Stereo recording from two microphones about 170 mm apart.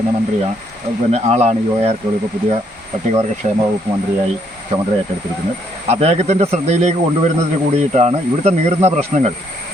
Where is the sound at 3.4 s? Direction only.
40° right (ahead or behind).